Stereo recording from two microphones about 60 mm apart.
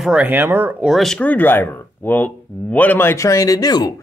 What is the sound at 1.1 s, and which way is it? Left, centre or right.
Speech, left.